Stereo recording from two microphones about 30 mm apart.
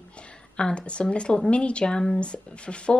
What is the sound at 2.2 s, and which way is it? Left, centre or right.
Speech, left.